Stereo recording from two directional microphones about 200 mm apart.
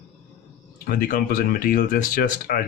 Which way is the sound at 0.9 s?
45° left (ahead or behind).